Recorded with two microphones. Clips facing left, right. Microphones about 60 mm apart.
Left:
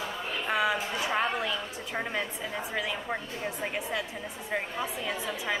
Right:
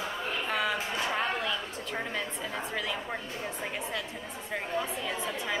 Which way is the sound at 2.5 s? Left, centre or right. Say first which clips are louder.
Left 1 dB; centre.